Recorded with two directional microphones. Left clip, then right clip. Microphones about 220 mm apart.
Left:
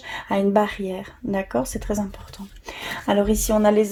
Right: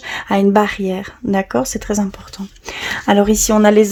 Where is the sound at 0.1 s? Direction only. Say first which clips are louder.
Right 6 dB; 30° right (ahead or behind).